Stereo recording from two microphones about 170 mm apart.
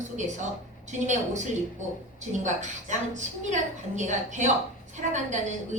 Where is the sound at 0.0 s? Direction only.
45° right (ahead or behind).